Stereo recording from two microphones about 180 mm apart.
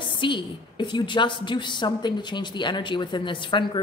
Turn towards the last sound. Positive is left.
turn(degrees=25)  # may be behind; listen again after turning